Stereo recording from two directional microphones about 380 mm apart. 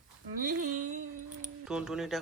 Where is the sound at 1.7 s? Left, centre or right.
Centre.